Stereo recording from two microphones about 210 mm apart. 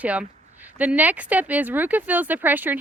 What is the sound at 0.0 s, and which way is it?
Speech, 5° right (ahead or behind).